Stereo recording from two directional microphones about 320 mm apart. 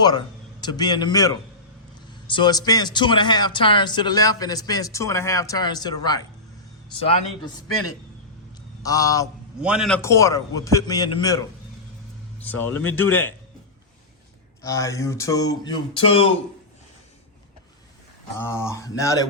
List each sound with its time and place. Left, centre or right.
0.6 s a man's voice: centre
8.8 s a man's voice: centre
9.6 s a man's voice: centre
14.6 s a man's voice: centre
18.3 s a man's voice: centre